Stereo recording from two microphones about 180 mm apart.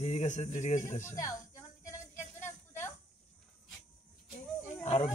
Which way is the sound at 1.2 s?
20° left (ahead or behind).